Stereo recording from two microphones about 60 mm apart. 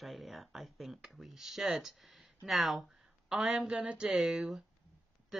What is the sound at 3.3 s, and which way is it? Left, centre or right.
A woman's voice, centre.